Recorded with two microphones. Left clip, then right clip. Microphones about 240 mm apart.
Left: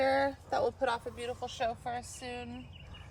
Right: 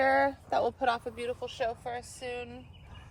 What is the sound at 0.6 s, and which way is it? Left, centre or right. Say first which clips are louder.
Speech: right 2 dB; right.